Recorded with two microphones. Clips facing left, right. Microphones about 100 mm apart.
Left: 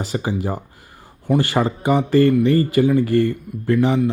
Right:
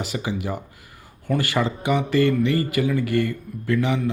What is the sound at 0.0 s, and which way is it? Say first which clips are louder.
Speech: left 4 dB; 35° left (ahead or behind).